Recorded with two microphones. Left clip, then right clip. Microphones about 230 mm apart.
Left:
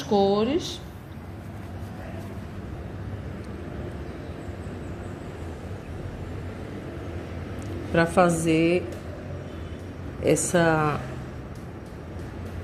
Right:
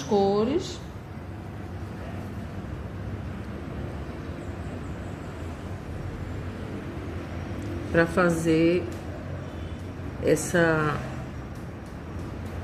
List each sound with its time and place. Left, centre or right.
0.1 s speech: left
7.9 s a woman's voice: left
10.2 s a woman's voice: left